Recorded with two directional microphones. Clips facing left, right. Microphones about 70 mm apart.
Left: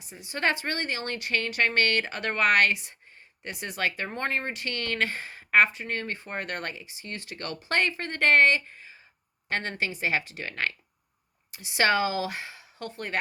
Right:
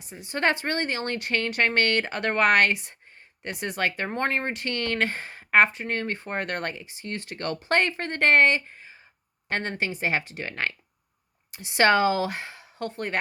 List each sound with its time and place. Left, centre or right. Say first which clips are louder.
0.0 s speech: right 3 dB; right